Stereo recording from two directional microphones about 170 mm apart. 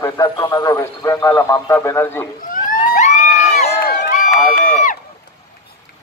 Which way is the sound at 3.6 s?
65° left (ahead or behind).